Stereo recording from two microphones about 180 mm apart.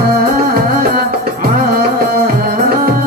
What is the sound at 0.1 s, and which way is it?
Music, 55° right (ahead or behind).